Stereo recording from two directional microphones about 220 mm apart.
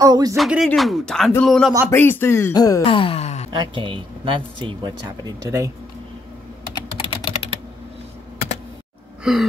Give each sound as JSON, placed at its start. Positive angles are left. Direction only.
{"t": 0.0, "sound": "music", "side_deg": -15}
{"t": 0.4, "sound": "speech", "side_deg": 0}
{"t": 2.8, "sound": "wail", "side_deg": 25}
{"t": 3.5, "sound": "speech", "side_deg": -20}
{"t": 6.7, "sound": "typing", "side_deg": 20}
{"t": 9.2, "sound": "gasp", "side_deg": 0}